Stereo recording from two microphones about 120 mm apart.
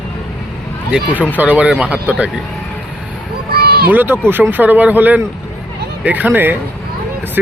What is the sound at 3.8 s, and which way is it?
Speech, 15° right (ahead or behind).